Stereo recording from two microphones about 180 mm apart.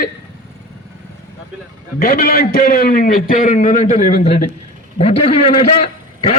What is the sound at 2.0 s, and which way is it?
A man's voice, 55° left (ahead or behind).